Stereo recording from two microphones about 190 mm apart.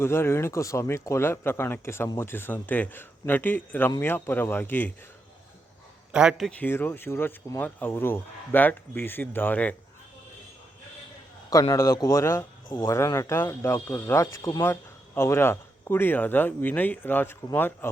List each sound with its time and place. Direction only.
0.0 s speech: 15° left (ahead or behind)
6.1 s speech: 5° right (ahead or behind)
6.7 s speech: 10° left (ahead or behind)
11.7 s speech: 15° left (ahead or behind)